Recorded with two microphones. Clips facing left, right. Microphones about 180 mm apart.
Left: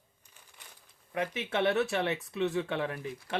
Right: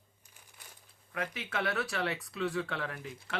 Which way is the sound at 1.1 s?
25° left (ahead or behind).